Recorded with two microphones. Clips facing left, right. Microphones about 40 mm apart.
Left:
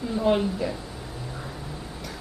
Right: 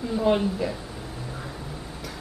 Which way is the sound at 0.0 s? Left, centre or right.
Centre.